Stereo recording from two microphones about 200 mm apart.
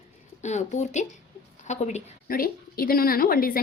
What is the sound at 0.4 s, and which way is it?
A woman's voice, 35° left (ahead or behind).